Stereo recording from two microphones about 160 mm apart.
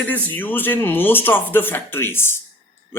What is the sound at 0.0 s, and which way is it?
A man's voice, 10° left (ahead or behind).